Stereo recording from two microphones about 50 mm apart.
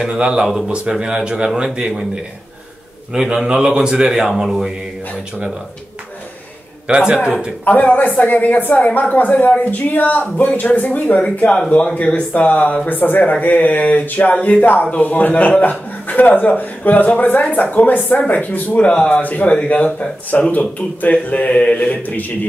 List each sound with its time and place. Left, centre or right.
0.1 s a man's voice: centre
3.1 s a man's voice: centre
4.3 s speech: centre
6.9 s speech: centre
7.6 s speech: left